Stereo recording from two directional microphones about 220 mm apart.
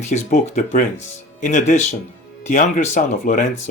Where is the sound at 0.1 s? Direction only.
35° left (ahead or behind).